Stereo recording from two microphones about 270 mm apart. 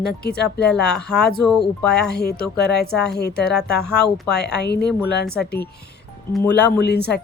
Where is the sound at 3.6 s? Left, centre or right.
Left.